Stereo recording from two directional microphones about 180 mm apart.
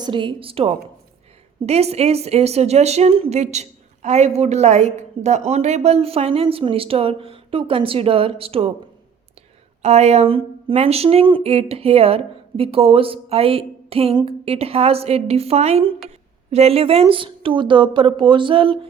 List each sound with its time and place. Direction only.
0.0 s a woman's voice: 25° right (ahead or behind)
9.8 s a woman's voice: 35° right (ahead or behind)